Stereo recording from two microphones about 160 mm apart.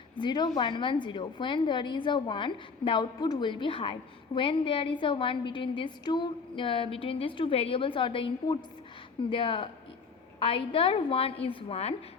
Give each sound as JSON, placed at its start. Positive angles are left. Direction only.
{"t": 0.2, "sound": "a woman's voice", "side_deg": 25}